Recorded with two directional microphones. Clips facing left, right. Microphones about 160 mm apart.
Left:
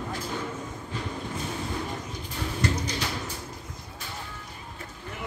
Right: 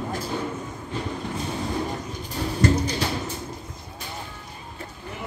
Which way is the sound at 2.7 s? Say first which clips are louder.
Right 6 dB; 30° right (ahead or behind).